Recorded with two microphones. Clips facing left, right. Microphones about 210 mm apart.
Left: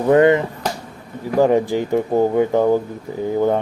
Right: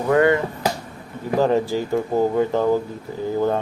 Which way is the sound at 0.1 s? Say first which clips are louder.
Left 4 dB; 20° left (ahead or behind).